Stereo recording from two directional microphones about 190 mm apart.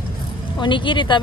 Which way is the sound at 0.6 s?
25° left (ahead or behind).